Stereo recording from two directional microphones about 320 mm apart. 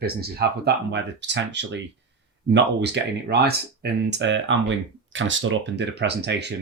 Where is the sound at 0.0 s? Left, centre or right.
Right.